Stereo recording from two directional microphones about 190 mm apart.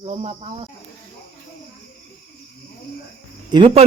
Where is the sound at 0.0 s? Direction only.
30° right (ahead or behind).